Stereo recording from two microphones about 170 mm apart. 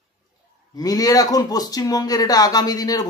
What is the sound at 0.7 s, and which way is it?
Speech, 20° left (ahead or behind).